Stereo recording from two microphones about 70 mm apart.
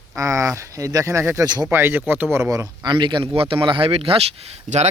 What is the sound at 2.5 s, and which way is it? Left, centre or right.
Speech, right.